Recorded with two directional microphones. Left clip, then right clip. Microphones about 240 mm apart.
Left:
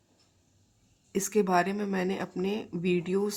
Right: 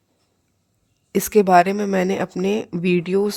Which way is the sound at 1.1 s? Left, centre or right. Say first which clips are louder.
Right 12 dB; right.